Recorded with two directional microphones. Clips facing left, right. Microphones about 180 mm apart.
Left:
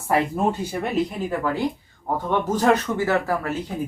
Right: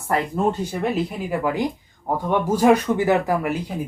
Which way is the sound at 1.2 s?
15° right (ahead or behind).